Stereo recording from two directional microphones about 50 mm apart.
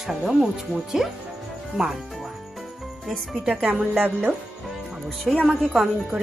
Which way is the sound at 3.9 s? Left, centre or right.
Right.